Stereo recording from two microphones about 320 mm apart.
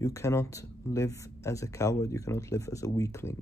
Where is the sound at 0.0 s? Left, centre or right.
Centre.